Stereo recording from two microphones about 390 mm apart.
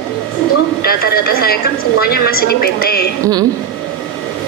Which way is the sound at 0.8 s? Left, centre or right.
Left.